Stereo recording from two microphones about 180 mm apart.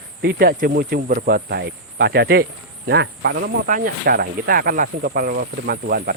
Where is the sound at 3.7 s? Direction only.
55° right (ahead or behind).